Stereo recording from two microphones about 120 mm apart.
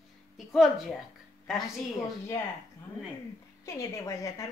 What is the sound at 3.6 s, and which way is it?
Speech, 25° left (ahead or behind).